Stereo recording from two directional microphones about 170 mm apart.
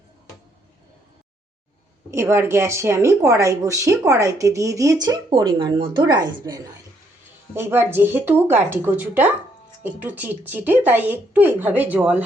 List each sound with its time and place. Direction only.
2.0 s speech: 15° right (ahead or behind)
7.5 s speech: 15° right (ahead or behind)